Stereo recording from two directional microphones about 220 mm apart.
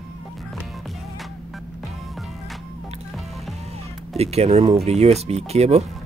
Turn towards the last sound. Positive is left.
turn(degrees=-30)  # may be behind; listen again after turning